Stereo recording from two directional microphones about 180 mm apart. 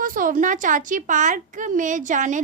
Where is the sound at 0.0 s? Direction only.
50° right (ahead or behind).